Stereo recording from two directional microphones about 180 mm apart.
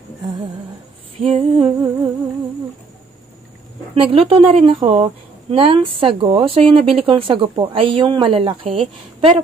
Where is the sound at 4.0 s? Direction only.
30° right (ahead or behind).